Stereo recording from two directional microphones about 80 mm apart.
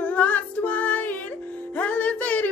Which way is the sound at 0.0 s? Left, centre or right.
Centre.